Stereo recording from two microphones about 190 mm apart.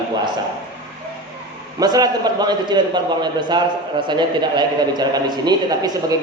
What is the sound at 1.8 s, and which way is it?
A man's voice, 20° right (ahead or behind).